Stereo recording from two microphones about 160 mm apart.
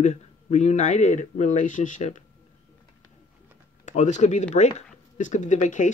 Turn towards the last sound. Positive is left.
turn(degrees=50)  # may be behind; listen again after turning